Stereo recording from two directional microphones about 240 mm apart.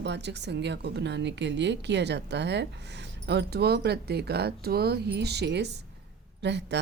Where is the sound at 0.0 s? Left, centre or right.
Right.